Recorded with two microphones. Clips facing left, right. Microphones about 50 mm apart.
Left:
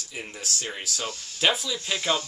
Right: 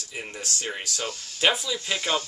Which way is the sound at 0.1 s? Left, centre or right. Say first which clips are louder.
Right 1 dB; centre.